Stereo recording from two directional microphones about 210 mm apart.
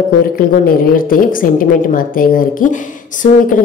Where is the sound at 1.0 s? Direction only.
40° left (ahead or behind).